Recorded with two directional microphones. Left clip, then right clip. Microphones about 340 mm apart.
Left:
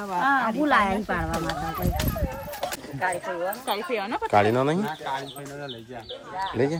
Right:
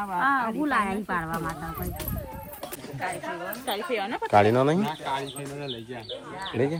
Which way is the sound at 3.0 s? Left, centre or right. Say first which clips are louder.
Left 5 dB; centre.